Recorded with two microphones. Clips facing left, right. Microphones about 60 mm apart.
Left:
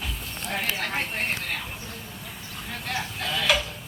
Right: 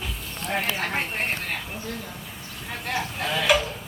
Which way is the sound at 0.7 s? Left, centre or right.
Right.